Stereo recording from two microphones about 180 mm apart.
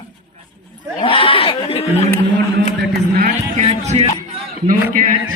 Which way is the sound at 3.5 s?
35° right (ahead or behind).